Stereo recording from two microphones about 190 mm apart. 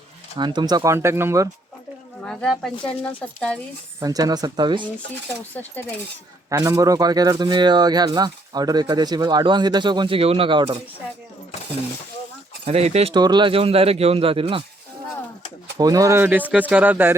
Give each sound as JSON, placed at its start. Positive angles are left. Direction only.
{"t": 0.3, "sound": "speech", "side_deg": -25}
{"t": 2.2, "sound": "speech", "side_deg": 5}
{"t": 4.0, "sound": "speech", "side_deg": -20}
{"t": 6.5, "sound": "speech", "side_deg": -15}
{"t": 12.6, "sound": "speech", "side_deg": -35}
{"t": 15.8, "sound": "speech", "side_deg": -20}